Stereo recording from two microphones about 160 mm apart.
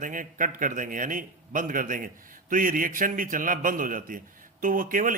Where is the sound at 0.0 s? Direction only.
55° right (ahead or behind).